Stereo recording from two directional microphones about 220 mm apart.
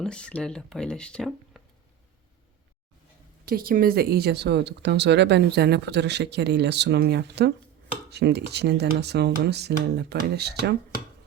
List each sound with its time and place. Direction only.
0.0 s speech: 5° left (ahead or behind)
3.4 s speech: 40° right (ahead or behind)